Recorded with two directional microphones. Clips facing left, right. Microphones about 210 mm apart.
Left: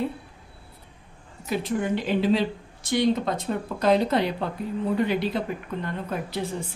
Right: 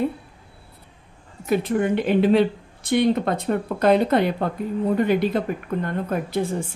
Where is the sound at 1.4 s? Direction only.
55° right (ahead or behind).